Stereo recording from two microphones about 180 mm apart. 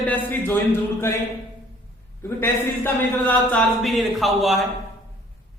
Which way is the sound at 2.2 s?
10° left (ahead or behind).